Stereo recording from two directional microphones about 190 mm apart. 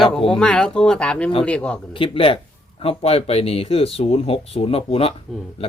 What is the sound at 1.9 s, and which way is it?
Speech, 30° left (ahead or behind).